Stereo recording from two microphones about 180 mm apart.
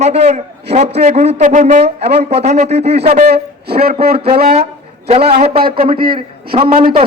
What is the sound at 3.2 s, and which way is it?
Speech, 60° right (ahead or behind).